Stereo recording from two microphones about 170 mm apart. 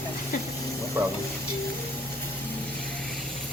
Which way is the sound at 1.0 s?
15° right (ahead or behind).